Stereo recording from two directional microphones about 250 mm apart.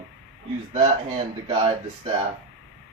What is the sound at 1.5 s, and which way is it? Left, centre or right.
Speech, right.